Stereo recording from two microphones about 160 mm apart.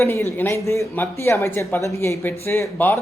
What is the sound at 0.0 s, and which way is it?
A woman's voice, 15° left (ahead or behind).